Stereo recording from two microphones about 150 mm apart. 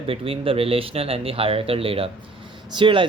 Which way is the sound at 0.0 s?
40° right (ahead or behind).